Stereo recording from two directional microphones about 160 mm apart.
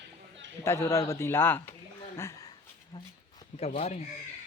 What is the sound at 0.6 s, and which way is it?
Speech, 15° left (ahead or behind).